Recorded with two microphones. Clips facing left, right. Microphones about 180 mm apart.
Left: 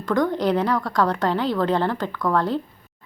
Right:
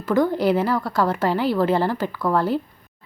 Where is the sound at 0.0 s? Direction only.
5° right (ahead or behind).